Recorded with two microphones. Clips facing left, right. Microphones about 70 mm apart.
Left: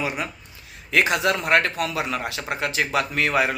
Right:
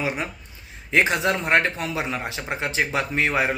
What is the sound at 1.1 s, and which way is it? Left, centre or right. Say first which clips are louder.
A man's voice: left 1 dB; right.